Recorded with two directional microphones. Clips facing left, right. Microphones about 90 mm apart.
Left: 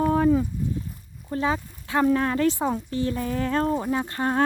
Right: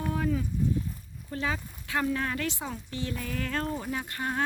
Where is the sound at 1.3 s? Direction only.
30° left (ahead or behind).